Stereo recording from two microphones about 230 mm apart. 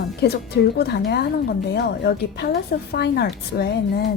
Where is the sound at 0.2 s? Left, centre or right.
Left.